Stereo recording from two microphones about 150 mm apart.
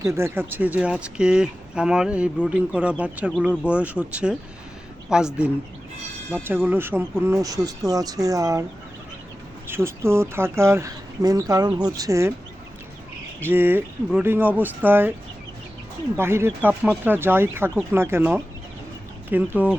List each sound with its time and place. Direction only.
0.0 s speech: 20° right (ahead or behind)
9.6 s speech: 15° right (ahead or behind)
13.4 s speech: 15° right (ahead or behind)
16.1 s speech: 15° right (ahead or behind)